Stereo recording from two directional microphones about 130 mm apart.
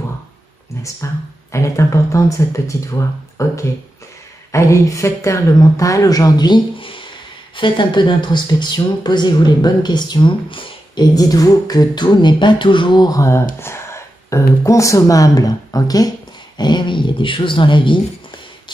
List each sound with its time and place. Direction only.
0.8 s speech: 25° left (ahead or behind); by 11.1 s 40° left (ahead or behind)
11.1 s speech: 25° left (ahead or behind)